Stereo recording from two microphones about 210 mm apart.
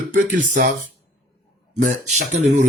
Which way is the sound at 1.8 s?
35° right (ahead or behind).